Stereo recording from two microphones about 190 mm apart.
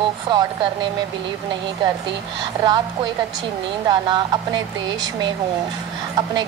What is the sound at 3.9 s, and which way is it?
A woman's voice, 20° right (ahead or behind).